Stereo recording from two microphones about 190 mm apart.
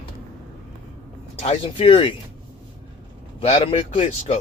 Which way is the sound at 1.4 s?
30° left (ahead or behind).